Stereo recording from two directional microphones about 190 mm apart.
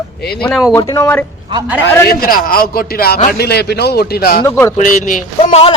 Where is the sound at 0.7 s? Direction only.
20° left (ahead or behind).